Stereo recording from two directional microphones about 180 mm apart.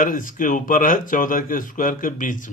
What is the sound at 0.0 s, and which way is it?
Speech, 50° left (ahead or behind).